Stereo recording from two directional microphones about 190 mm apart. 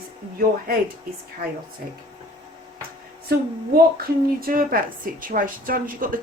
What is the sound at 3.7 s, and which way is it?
A woman's voice, 50° right (ahead or behind).